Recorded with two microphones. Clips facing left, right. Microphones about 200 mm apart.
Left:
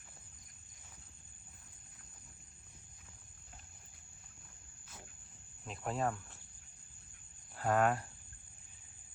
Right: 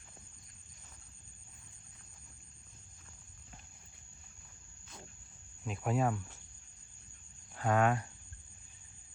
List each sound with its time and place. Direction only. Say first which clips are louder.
5.6 s speech: right 4 dB; centre (ahead or behind)
7.5 s speech: right 1 dB; 5° left (ahead or behind)